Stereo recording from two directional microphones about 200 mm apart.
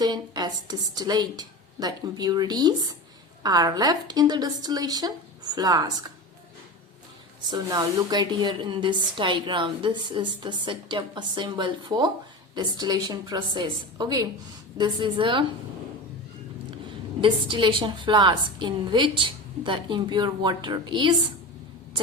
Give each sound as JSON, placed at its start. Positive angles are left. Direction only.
{"t": 0.0, "sound": "a woman's voice", "side_deg": -20}
{"t": 7.5, "sound": "a woman's voice", "side_deg": -20}
{"t": 17.2, "sound": "a woman's voice", "side_deg": -25}